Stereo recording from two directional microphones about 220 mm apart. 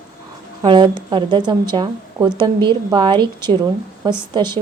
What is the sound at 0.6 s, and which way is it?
Speech, 20° right (ahead or behind).